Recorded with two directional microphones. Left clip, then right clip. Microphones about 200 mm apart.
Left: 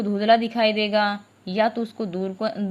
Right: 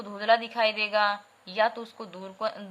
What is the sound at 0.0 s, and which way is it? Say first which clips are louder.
A woman's voice: left 5 dB; 15° left (ahead or behind).